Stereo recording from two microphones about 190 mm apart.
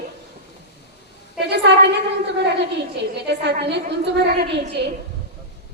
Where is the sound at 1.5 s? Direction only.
65° right (ahead or behind).